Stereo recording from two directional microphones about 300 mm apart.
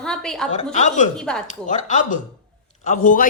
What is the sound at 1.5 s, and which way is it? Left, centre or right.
Speech, left.